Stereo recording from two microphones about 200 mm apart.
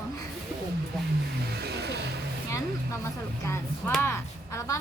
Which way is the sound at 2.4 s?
15° left (ahead or behind).